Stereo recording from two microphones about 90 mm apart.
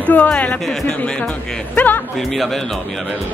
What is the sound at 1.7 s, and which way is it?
Speech, 20° left (ahead or behind).